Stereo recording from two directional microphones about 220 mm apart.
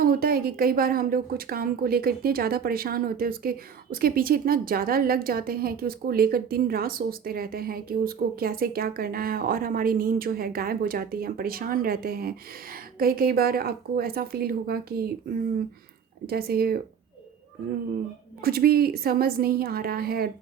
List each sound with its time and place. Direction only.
0.0 s a woman's voice: 40° right (ahead or behind)
18.4 s a woman's voice: 45° right (ahead or behind)